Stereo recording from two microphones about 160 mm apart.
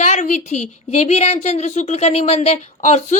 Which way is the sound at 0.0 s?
50° left (ahead or behind).